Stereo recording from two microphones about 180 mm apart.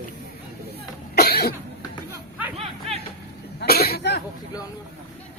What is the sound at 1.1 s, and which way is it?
Cough, 60° left (ahead or behind).